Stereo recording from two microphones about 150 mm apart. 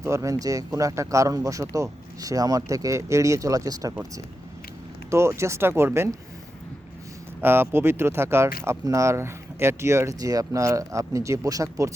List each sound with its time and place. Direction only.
0.0 s speech: 20° right (ahead or behind)
5.1 s speech: 20° right (ahead or behind)
7.4 s speech: 15° right (ahead or behind)